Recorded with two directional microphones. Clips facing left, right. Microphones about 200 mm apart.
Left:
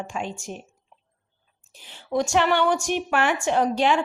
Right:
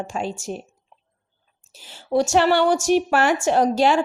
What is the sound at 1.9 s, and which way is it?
A woman's voice, 40° right (ahead or behind).